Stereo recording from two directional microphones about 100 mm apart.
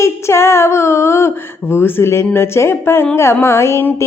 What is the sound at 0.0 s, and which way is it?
Speech, 25° left (ahead or behind).